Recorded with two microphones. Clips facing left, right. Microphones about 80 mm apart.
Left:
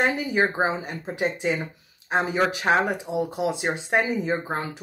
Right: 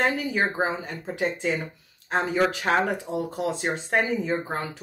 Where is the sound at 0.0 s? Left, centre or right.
Centre.